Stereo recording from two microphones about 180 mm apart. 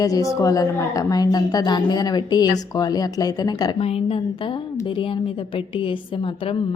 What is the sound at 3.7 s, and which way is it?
A woman's voice, 35° left (ahead or behind).